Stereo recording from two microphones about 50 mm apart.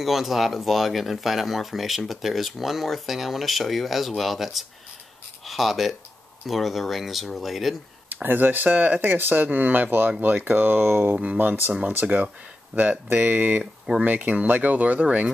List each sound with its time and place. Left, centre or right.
0.0 s speech: centre
8.1 s speech: right